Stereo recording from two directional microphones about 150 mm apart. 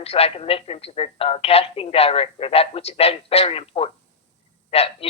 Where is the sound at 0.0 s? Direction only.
40° left (ahead or behind).